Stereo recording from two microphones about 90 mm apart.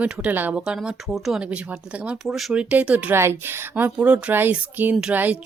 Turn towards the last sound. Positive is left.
turn(degrees=-20)  # may be behind; listen again after turning